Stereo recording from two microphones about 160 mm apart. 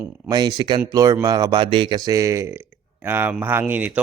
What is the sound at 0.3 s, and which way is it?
A man's voice, 25° right (ahead or behind).